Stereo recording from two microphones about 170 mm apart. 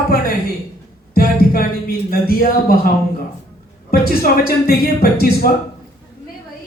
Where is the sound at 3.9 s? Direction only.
65° left (ahead or behind).